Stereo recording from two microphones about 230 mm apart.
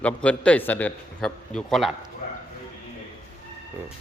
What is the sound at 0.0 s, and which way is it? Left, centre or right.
A man's voice, centre.